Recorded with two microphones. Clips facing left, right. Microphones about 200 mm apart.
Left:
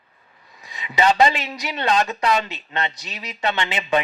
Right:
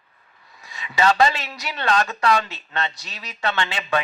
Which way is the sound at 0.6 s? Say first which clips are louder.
Left 1 dB; 20° left (ahead or behind).